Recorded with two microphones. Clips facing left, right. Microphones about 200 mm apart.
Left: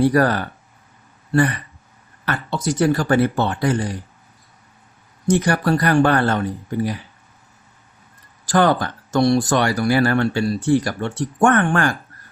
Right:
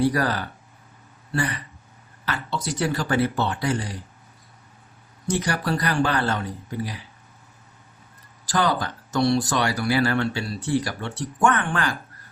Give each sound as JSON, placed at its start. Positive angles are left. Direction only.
{"t": 0.0, "sound": "speech", "side_deg": 55}
{"t": 5.3, "sound": "speech", "side_deg": 50}
{"t": 8.4, "sound": "speech", "side_deg": 55}